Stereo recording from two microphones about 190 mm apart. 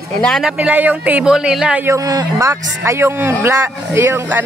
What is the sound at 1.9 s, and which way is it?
Speech, 20° right (ahead or behind).